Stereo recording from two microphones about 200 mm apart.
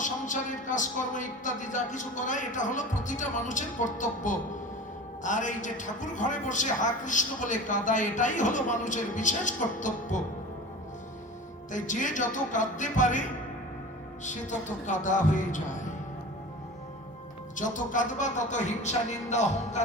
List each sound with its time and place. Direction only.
0.0 s a woman's voice: 40° left (ahead or behind)
11.7 s a woman's voice: 40° left (ahead or behind)
14.3 s a woman's voice: 40° left (ahead or behind)
17.6 s a woman's voice: 40° left (ahead or behind)